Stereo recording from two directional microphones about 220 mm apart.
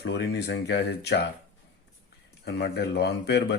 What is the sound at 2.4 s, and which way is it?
Speech, 50° left (ahead or behind).